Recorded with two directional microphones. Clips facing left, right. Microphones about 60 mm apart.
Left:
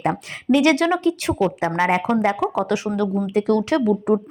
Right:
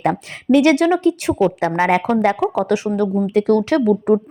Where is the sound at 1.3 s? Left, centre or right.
Centre.